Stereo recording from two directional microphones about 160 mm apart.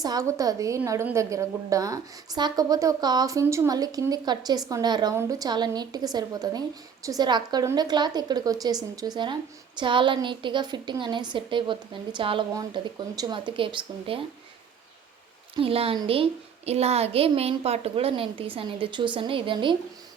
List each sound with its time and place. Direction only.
0.0 s a woman's voice: 20° right (ahead or behind)
15.5 s speech: 35° right (ahead or behind)